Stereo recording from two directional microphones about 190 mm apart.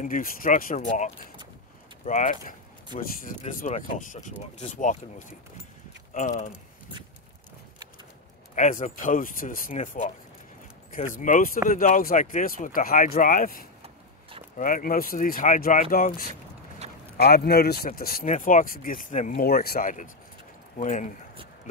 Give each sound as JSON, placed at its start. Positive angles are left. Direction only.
{"t": 0.0, "sound": "speech", "side_deg": 45}
{"t": 8.5, "sound": "speech", "side_deg": 40}
{"t": 16.8, "sound": "clip-clop", "side_deg": -35}
{"t": 17.2, "sound": "speech", "side_deg": 55}